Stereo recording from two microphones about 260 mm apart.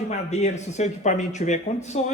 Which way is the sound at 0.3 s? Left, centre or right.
Left.